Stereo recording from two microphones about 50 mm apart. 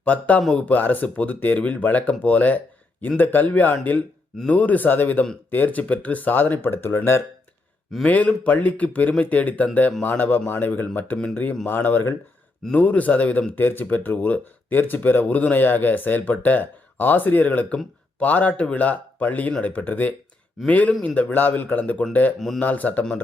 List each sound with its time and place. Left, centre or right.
0.0 s speech: left
8.0 s speech: left
12.7 s speech: left